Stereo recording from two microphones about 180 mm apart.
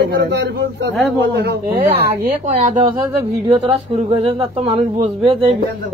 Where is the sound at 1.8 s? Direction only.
50° right (ahead or behind).